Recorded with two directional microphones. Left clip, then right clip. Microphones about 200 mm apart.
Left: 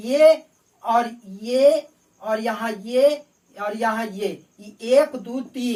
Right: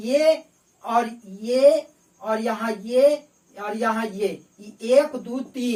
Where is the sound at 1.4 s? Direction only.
5° right (ahead or behind).